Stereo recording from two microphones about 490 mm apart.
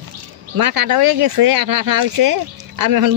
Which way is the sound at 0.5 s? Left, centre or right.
Right.